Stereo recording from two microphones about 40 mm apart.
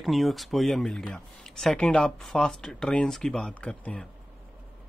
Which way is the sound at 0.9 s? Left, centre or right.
Left.